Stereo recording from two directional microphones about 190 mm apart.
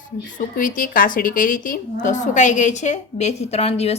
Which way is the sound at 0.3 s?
45° left (ahead or behind).